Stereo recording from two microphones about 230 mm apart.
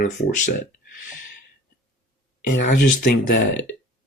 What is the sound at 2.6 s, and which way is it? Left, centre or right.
Speech, left.